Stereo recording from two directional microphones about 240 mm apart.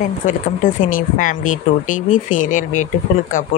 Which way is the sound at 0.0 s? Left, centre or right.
Left.